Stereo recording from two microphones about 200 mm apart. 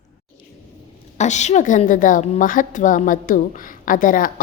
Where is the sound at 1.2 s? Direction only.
35° left (ahead or behind).